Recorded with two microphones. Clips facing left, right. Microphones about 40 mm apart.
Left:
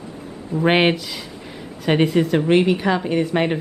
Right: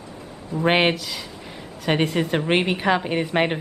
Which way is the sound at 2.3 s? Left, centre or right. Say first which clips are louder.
Left 5 dB; right.